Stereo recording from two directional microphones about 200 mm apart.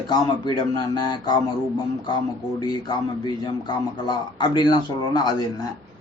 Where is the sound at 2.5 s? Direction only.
20° left (ahead or behind).